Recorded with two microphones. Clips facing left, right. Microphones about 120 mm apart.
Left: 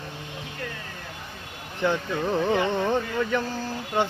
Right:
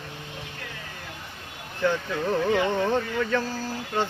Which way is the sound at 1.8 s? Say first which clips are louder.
Even; 15° left (ahead or behind).